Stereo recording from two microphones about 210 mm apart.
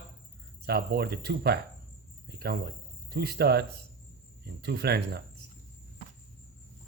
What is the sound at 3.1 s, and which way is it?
Speech, 50° right (ahead or behind).